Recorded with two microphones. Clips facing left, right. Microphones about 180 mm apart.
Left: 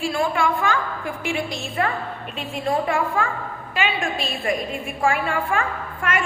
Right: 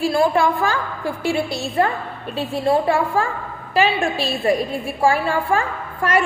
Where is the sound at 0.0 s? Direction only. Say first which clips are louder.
Right 5 dB; 35° right (ahead or behind).